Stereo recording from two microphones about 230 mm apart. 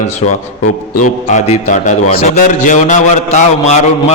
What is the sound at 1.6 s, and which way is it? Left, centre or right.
A man's voice, left.